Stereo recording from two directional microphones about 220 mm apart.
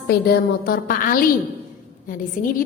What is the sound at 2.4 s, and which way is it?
Speech, 40° left (ahead or behind).